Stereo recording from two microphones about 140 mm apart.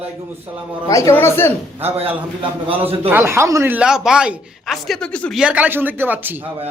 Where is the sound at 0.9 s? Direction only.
25° left (ahead or behind).